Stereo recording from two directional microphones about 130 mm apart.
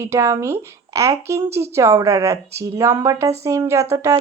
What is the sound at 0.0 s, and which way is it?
A woman's voice, 20° right (ahead or behind).